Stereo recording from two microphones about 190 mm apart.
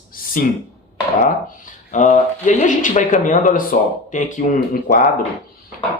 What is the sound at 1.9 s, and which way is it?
Speech, 40° left (ahead or behind).